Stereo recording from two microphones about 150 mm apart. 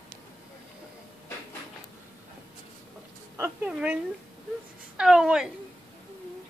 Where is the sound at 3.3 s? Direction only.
15° right (ahead or behind).